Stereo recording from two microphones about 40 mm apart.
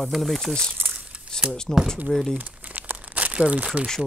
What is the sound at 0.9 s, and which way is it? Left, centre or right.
Crumpling, right.